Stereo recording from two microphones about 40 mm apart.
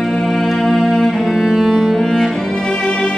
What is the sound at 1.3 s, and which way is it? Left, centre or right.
Music, centre.